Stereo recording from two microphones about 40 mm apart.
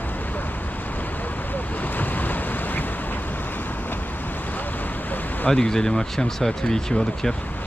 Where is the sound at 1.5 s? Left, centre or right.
Left.